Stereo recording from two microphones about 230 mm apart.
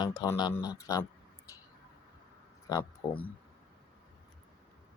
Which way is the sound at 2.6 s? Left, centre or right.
Centre.